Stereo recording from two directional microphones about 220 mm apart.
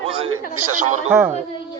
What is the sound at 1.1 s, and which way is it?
Speech, 10° right (ahead or behind).